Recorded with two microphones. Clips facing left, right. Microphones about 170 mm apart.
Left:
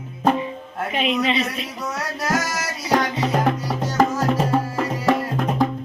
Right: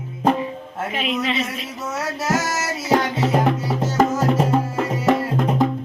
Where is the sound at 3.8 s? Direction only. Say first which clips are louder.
Right 1 dB; 25° right (ahead or behind).